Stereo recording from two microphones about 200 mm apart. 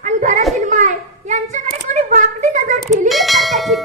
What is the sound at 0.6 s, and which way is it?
Hands, 40° right (ahead or behind).